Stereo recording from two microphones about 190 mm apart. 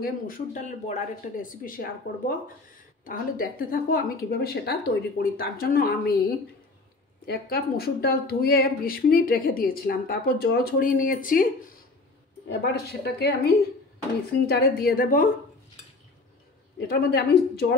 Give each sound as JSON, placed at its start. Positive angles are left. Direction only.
{"t": 0.0, "sound": "speech", "side_deg": 45}
{"t": 7.2, "sound": "speech", "side_deg": 55}
{"t": 12.4, "sound": "a woman's voice", "side_deg": 60}
{"t": 16.7, "sound": "a woman's voice", "side_deg": 60}